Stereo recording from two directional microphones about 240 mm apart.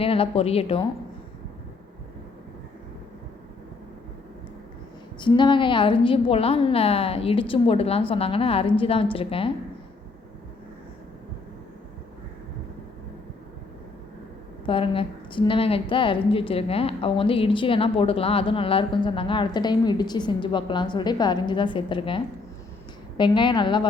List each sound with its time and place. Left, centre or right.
0.0 s a woman's voice: left
5.2 s a woman's voice: centre
14.7 s a woman's voice: left